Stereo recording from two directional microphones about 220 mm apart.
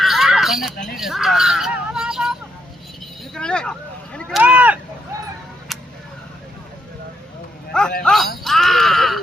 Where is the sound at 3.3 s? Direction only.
5° left (ahead or behind).